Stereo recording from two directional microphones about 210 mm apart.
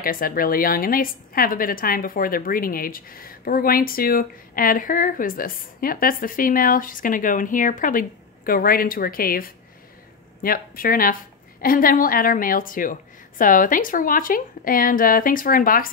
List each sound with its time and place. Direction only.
0.0 s a woman's voice: 40° left (ahead or behind)